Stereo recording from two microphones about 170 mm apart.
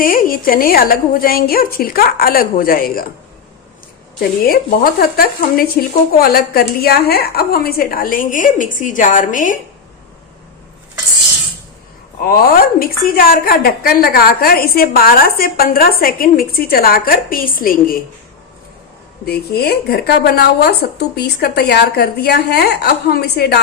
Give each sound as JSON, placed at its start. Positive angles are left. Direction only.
{"t": 0.0, "sound": "a woman's voice", "side_deg": 55}
{"t": 4.2, "sound": "a woman's voice", "side_deg": 60}
{"t": 12.2, "sound": "a woman's voice", "side_deg": 60}
{"t": 19.2, "sound": "a woman's voice", "side_deg": 70}